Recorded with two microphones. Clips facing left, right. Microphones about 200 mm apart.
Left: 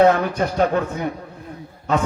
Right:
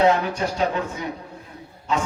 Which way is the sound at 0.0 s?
55° left (ahead or behind).